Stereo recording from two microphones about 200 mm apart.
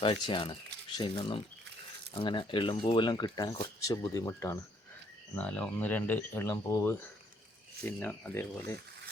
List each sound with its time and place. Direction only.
0.0 s speech: 25° left (ahead or behind)